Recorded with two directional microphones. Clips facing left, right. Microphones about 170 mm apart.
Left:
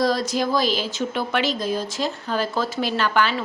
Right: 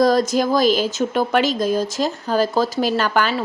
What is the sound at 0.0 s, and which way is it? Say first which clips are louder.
Speech: right 5 dB; 45° right (ahead or behind).